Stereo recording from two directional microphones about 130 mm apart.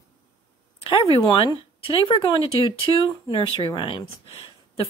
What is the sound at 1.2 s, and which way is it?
Speech, 40° left (ahead or behind).